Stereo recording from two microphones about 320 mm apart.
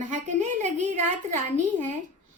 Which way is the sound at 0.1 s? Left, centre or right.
Right.